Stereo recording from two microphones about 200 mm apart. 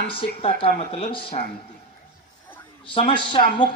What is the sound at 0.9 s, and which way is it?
Speech, 30° left (ahead or behind).